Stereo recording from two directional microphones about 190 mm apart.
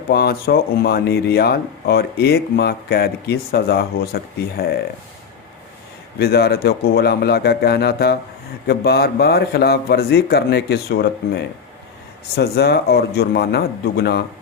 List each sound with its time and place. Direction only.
0.1 s speech: 55° left (ahead or behind)
6.1 s speech: 55° left (ahead or behind)